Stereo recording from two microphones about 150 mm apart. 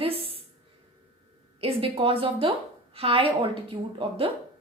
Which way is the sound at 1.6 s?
40° right (ahead or behind).